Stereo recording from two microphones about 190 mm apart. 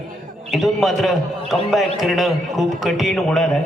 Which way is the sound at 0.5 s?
Centre (ahead or behind).